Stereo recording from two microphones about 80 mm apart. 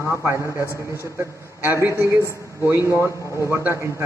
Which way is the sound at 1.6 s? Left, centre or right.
Right.